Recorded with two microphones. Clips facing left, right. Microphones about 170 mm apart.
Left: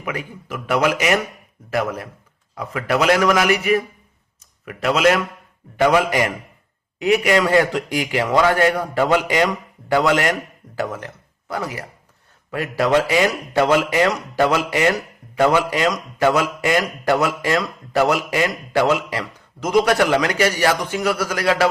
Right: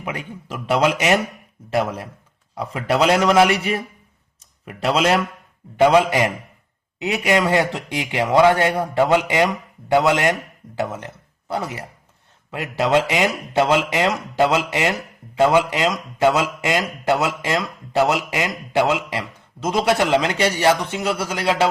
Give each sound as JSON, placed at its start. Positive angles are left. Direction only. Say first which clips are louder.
{"t": 0.0, "sound": "a man's voice", "louder": "left 1 dB", "side_deg": -30}